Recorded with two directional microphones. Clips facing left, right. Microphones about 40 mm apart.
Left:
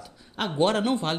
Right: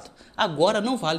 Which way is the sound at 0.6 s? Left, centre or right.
Left.